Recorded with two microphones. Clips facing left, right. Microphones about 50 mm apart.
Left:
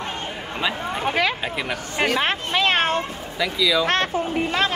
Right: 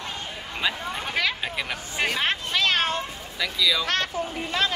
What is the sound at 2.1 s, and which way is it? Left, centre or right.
Cat, left.